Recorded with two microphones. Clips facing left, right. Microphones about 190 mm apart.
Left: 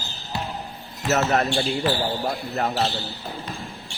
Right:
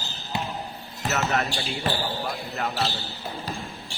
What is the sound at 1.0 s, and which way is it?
Speech, 40° left (ahead or behind).